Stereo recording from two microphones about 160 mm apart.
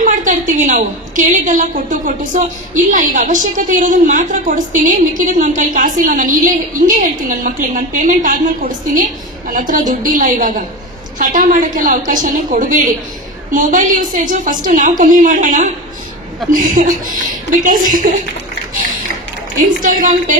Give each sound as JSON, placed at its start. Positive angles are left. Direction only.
{"t": 0.0, "sound": "a woman's voice", "side_deg": -50}
{"t": 19.8, "sound": "a woman's voice", "side_deg": -55}